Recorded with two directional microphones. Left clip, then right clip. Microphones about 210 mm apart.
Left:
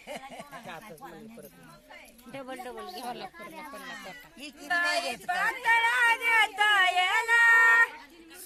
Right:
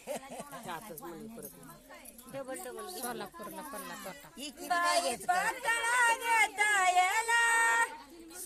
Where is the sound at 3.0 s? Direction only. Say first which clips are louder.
Left 2 dB; 10° right (ahead or behind).